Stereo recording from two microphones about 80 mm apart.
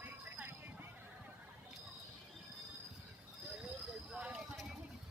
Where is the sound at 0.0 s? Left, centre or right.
Right.